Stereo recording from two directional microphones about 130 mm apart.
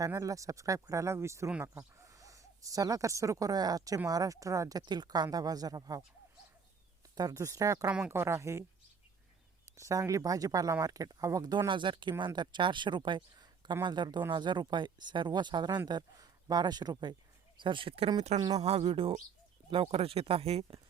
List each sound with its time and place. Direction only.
0.0 s speech: 25° right (ahead or behind)
7.2 s speech: 25° right (ahead or behind)
7.9 s speech: 10° right (ahead or behind)
8.2 s speech: 20° right (ahead or behind)
9.7 s speech: 25° right (ahead or behind); by 18.1 s 45° right (ahead or behind)
18.2 s speech: 60° right (ahead or behind)